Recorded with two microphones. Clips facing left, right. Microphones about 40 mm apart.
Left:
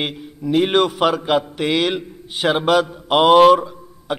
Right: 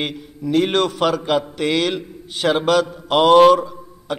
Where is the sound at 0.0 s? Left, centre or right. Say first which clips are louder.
Even; centre.